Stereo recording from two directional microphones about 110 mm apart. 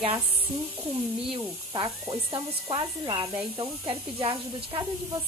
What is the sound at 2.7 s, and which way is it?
Speech, 45° right (ahead or behind).